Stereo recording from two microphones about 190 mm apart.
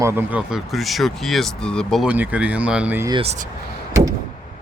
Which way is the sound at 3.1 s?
30° right (ahead or behind).